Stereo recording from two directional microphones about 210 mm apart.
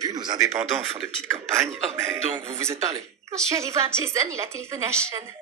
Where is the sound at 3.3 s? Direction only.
15° right (ahead or behind).